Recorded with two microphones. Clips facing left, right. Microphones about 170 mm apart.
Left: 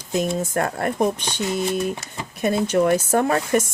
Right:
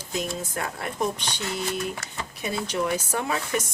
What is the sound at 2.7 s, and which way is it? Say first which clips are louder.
Speech: left 8 dB; 50° left (ahead or behind).